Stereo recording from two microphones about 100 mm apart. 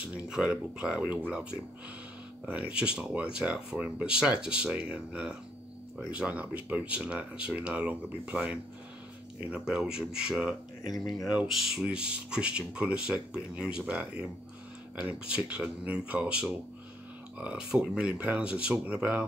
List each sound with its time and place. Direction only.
0.3 s speech: 10° right (ahead or behind)